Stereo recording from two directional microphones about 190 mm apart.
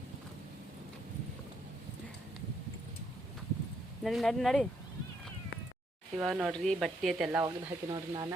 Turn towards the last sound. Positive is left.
turn(degrees=-5)  # may be behind; listen again after turning